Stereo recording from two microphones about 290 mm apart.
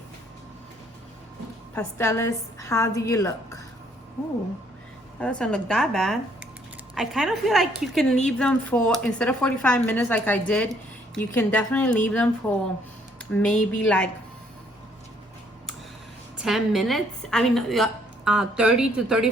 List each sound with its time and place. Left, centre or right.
1.7 s a woman's voice: centre
5.4 s speech: centre
13.3 s speech: centre
16.4 s speech: centre